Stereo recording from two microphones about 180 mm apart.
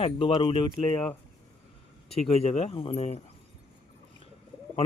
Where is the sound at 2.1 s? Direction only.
35° left (ahead or behind).